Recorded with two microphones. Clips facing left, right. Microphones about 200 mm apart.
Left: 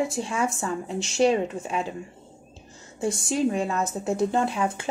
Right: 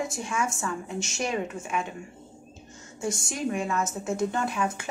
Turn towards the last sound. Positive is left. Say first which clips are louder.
# left 4 dB
turn(degrees=30)  # may be behind; listen again after turning